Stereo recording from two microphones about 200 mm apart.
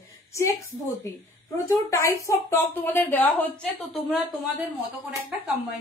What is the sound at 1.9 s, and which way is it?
Speech, 15° left (ahead or behind).